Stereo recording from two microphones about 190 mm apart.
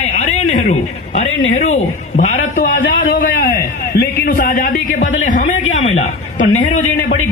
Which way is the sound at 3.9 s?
55° left (ahead or behind).